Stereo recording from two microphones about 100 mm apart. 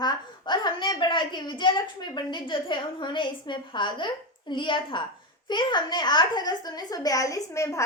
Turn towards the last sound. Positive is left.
turn(degrees=30)  # may be behind; listen again after turning